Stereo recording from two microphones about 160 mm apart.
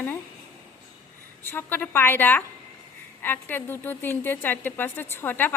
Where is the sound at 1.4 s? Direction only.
15° left (ahead or behind).